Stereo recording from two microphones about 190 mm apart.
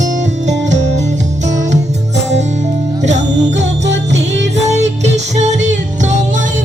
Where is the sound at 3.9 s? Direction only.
70° right (ahead or behind).